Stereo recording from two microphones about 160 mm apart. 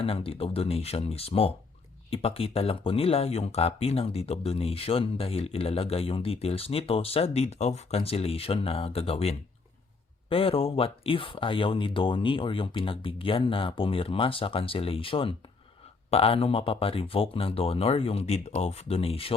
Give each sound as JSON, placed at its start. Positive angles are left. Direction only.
{"t": 0.0, "sound": "speech", "side_deg": 35}